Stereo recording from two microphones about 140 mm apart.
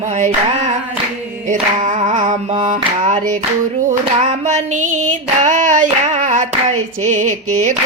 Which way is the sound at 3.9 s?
60° right (ahead or behind).